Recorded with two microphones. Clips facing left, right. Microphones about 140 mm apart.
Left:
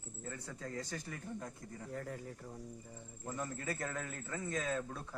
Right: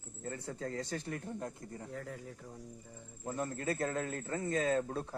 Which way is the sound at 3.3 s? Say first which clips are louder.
Right 5 dB; 25° right (ahead or behind).